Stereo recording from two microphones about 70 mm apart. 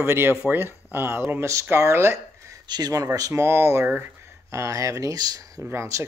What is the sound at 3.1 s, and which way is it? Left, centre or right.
Speech, right.